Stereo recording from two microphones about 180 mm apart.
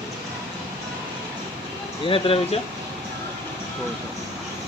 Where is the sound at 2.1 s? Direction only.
30° left (ahead or behind).